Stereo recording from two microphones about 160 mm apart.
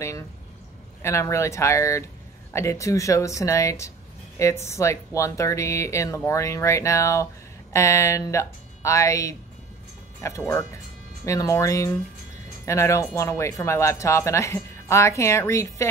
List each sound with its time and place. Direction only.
1.0 s speech: 20° left (ahead or behind)